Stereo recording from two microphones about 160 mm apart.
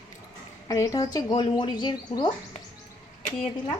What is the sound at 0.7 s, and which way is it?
Speech, 20° left (ahead or behind).